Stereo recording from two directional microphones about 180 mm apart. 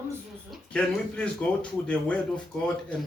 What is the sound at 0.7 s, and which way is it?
Speech, 5° left (ahead or behind).